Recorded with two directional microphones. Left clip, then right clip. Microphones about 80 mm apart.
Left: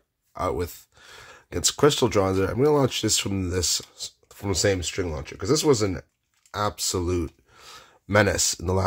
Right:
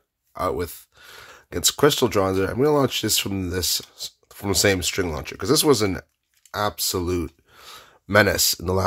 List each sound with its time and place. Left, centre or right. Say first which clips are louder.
0.3 s speech: right 2 dB; centre
4.5 s speech: right 4 dB; right
6.5 s speech: right 2 dB; right